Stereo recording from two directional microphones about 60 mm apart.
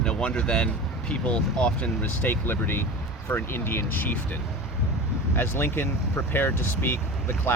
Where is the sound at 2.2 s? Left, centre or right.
Left.